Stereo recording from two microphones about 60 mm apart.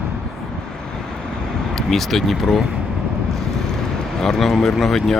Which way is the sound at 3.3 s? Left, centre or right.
Centre.